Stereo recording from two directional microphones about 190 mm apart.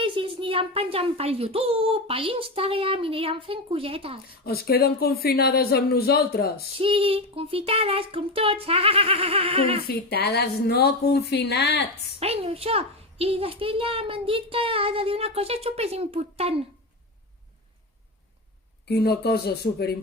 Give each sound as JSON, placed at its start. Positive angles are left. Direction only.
{"t": 0.0, "sound": "a child's voice", "side_deg": -25}
{"t": 4.4, "sound": "speech", "side_deg": 55}
{"t": 6.7, "sound": "a child's voice", "side_deg": -30}
{"t": 9.8, "sound": "speech", "side_deg": 55}
{"t": 12.2, "sound": "a child's voice", "side_deg": -30}
{"t": 18.9, "sound": "speech", "side_deg": 55}